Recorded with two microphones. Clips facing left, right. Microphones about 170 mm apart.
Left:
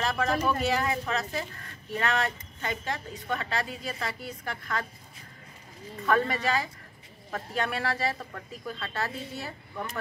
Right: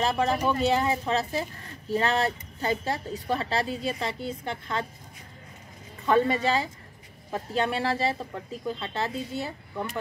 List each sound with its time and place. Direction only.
0.0 s speech: 30° right (ahead or behind)
6.0 s speech: 25° right (ahead or behind)